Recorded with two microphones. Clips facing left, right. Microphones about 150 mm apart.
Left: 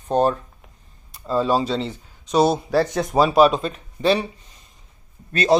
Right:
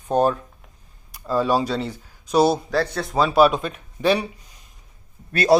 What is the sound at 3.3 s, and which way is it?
Speech, 5° right (ahead or behind).